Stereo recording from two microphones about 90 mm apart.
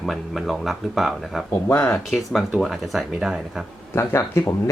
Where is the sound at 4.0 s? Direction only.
30° left (ahead or behind).